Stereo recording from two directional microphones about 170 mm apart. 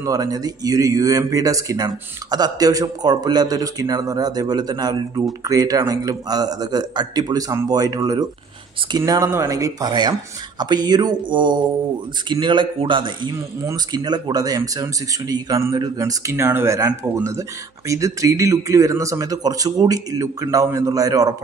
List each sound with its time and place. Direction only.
0.0 s a man's voice: 20° right (ahead or behind)